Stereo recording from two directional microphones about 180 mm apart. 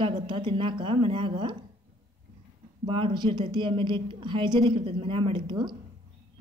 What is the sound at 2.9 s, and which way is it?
A woman's voice, 30° right (ahead or behind).